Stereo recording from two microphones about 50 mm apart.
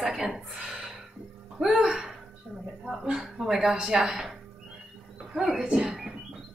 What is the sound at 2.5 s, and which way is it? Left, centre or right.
Speech, right.